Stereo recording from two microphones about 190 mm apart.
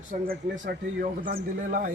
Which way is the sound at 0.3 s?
40° right (ahead or behind).